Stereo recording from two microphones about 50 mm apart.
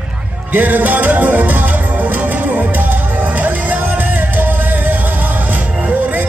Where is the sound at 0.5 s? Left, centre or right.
Right.